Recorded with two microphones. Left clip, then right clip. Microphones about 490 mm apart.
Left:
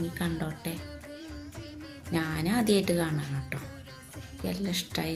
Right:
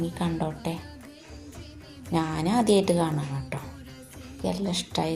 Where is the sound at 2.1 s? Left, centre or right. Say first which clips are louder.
Right 5 dB; left.